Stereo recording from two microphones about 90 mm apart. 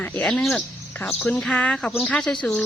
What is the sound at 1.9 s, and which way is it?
Speech, centre (ahead or behind).